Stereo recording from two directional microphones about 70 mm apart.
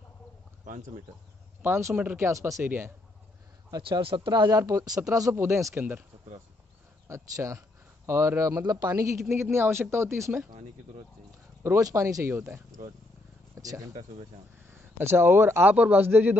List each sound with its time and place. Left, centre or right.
1.6 s speech: right
2.6 s a man's voice: right
3.7 s speech: right
4.6 s speech: right
5.3 s a man's voice: right
7.1 s speech: right
11.8 s speech: right
12.4 s speech: right
13.6 s speech: right
14.7 s speech: right
15.6 s a man's voice: right